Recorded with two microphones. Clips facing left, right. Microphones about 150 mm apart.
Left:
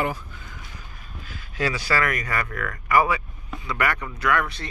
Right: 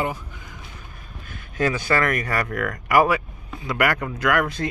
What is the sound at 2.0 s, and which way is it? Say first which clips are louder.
Speech: right 3 dB; 45° right (ahead or behind).